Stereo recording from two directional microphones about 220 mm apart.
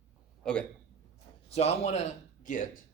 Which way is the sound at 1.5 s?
30° left (ahead or behind).